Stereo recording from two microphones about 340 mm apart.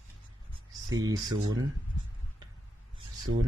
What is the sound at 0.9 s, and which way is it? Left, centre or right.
Speech, centre.